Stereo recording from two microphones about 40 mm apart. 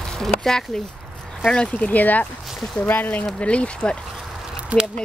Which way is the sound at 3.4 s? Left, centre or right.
Left.